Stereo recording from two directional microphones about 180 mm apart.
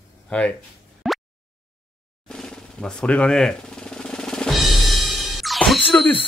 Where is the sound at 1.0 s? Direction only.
Centre (ahead or behind).